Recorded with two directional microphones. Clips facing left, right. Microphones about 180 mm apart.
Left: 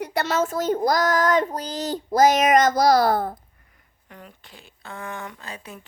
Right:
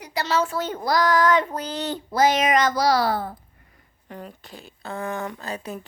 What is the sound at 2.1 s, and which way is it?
A child's voice, 45° left (ahead or behind).